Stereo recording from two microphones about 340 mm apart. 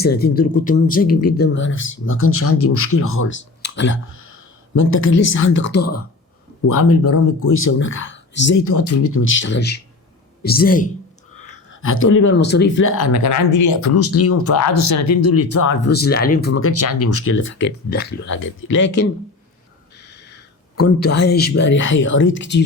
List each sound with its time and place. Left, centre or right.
0.0 s speech: left
8.8 s speech: left
11.7 s speech: left
13.1 s speech: left
15.7 s speech: left
21.0 s speech: left